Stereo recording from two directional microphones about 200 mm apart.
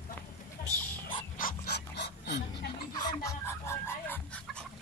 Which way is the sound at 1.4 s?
55° left (ahead or behind).